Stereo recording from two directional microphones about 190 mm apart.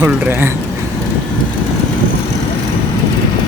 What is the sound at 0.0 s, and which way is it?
Speech, 10° right (ahead or behind).